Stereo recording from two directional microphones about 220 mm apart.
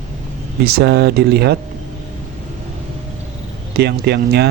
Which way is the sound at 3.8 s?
50° right (ahead or behind).